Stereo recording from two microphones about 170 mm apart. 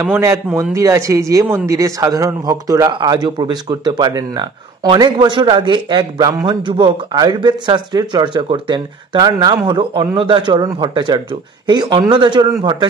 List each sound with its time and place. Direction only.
0.0 s speech: 15° right (ahead or behind)